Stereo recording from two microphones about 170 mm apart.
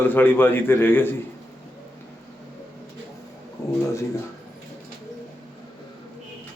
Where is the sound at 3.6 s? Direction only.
20° left (ahead or behind).